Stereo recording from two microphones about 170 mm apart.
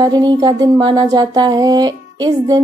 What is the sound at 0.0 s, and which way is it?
Speech, 25° right (ahead or behind).